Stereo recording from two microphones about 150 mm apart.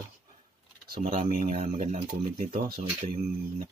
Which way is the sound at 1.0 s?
60° right (ahead or behind).